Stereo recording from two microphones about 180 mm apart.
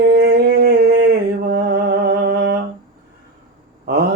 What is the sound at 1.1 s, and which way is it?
Mantra, 65° right (ahead or behind).